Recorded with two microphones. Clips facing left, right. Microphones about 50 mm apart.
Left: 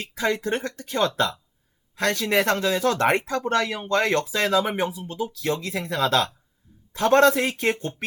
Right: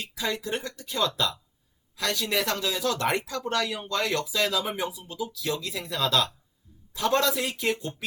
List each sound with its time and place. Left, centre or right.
0.0 s speech: left